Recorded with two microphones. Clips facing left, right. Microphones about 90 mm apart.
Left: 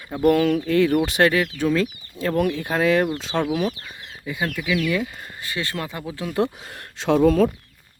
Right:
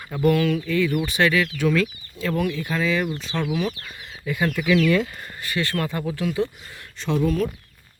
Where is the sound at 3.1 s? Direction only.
90° left.